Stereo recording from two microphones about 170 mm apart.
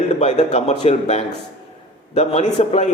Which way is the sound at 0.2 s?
40° left (ahead or behind).